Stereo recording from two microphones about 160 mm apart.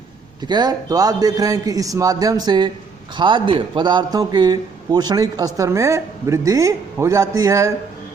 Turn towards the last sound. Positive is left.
turn(degrees=-20)  # may be behind; listen again after turning